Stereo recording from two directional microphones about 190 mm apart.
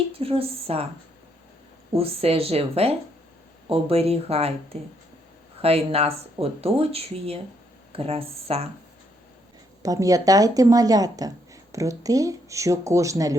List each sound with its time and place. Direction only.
0.1 s speech: 30° right (ahead or behind)
1.9 s speech: 30° right (ahead or behind)
9.8 s speech: 20° right (ahead or behind)